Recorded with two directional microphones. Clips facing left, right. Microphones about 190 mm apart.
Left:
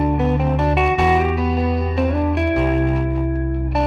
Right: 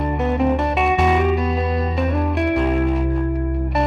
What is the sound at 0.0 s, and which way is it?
Music, centre (ahead or behind).